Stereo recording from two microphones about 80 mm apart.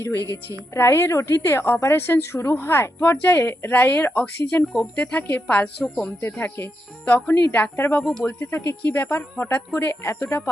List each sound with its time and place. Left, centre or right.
0.0 s a woman's voice: left